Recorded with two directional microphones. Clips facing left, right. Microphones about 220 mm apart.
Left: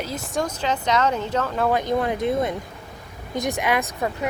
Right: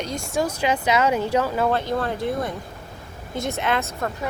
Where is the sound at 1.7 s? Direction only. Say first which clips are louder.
Left 2 dB; 15° left (ahead or behind).